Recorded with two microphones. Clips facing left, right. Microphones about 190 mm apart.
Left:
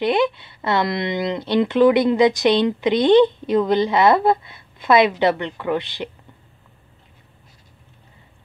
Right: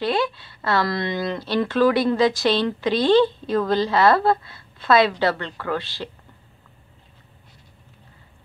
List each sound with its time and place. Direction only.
0.0 s speech: 20° left (ahead or behind)